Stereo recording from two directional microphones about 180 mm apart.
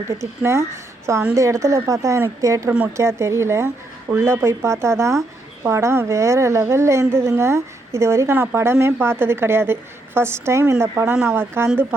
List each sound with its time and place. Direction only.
0.1 s a woman's voice: 15° right (ahead or behind)